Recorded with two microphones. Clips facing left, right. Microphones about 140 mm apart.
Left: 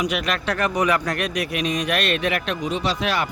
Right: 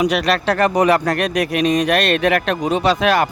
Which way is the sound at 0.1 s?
35° right (ahead or behind).